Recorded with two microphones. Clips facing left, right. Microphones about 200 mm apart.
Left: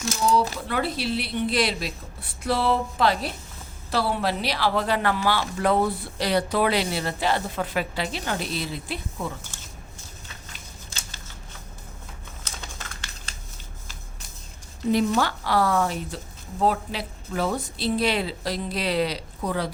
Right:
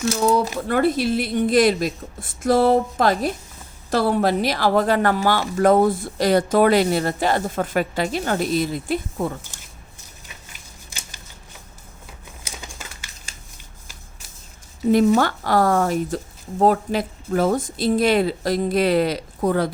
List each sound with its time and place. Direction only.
0.7 s speech: 50° right (ahead or behind)
12.5 s typewriter: 10° right (ahead or behind)
14.9 s speech: 50° right (ahead or behind)